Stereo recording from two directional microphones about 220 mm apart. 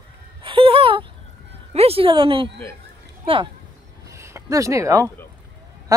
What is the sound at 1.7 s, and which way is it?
Speech, 25° right (ahead or behind).